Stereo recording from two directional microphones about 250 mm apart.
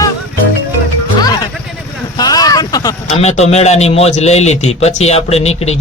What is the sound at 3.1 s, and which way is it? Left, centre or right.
A man's voice, left.